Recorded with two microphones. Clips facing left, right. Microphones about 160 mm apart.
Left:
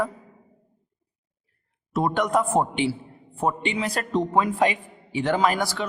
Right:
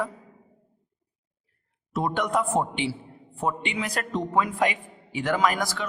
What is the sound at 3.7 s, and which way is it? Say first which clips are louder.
A man's voice: left 4 dB; 30° left (ahead or behind).